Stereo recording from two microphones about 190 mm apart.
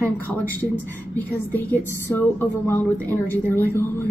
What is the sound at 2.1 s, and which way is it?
A woman's voice, 10° left (ahead or behind).